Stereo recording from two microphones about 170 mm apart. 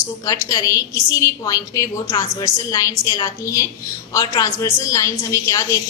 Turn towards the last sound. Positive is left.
turn(degrees=20)  # may be behind; listen again after turning